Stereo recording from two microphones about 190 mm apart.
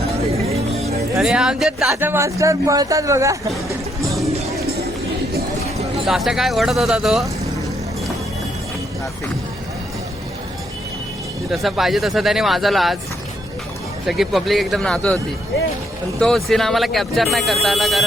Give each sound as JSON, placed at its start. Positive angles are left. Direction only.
{"t": 0.3, "sound": "music", "side_deg": -35}
{"t": 1.2, "sound": "speech", "side_deg": -5}
{"t": 1.9, "sound": "speech", "side_deg": -10}
{"t": 4.6, "sound": "run", "side_deg": -55}
{"t": 6.1, "sound": "speech", "side_deg": 0}
{"t": 11.5, "sound": "speech", "side_deg": 0}
{"t": 14.1, "sound": "speech", "side_deg": 0}
{"t": 16.2, "sound": "speech", "side_deg": 0}